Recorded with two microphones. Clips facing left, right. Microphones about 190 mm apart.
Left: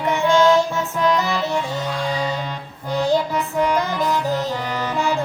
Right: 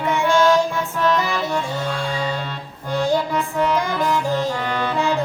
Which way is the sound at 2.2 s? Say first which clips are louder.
Left 1 dB; 10° left (ahead or behind).